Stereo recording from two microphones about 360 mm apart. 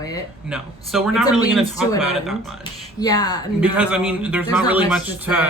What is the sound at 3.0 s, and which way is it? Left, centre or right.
Speech, centre.